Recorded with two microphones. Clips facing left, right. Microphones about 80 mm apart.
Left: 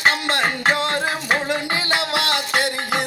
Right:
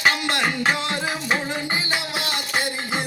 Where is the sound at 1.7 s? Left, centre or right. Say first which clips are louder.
Left 4 dB; left.